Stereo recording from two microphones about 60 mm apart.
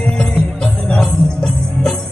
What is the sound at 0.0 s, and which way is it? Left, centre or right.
Music, centre.